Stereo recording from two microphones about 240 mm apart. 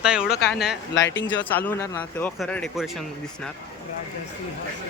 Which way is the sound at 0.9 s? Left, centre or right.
Left.